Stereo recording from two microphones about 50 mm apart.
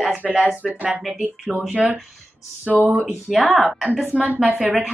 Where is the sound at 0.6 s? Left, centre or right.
Right.